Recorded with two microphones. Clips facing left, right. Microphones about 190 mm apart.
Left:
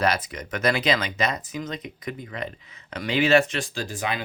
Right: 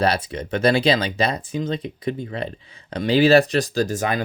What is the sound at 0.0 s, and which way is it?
Speech, 30° right (ahead or behind).